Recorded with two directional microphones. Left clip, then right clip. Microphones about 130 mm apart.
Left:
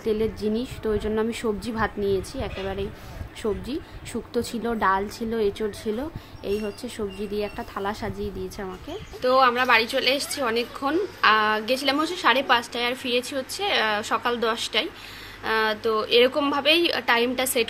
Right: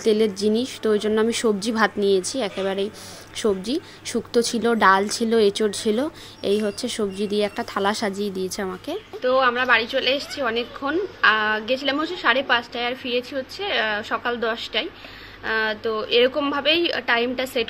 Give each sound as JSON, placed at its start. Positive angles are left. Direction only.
{"t": 0.0, "sound": "a woman's voice", "side_deg": -30}
{"t": 9.2, "sound": "a woman's voice", "side_deg": 20}